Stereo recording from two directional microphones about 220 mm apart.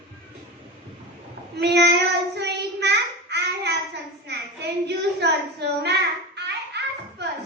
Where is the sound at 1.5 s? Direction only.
50° right (ahead or behind).